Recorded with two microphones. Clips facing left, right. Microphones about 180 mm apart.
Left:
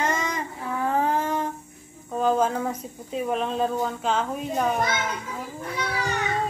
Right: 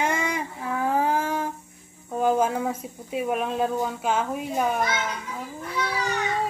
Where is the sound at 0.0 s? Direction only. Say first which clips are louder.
Right 1 dB; 10° right (ahead or behind).